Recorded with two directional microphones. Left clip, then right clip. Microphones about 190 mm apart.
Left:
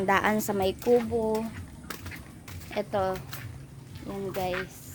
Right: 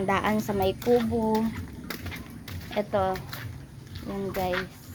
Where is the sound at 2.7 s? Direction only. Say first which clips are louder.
Right 2 dB; 15° left (ahead or behind).